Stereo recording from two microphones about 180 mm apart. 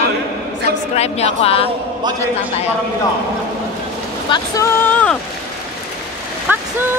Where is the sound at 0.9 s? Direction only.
35° left (ahead or behind).